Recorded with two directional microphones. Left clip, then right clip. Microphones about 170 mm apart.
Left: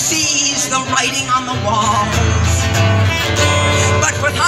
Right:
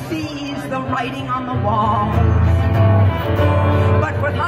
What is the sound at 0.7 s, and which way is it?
Music, 15° left (ahead or behind).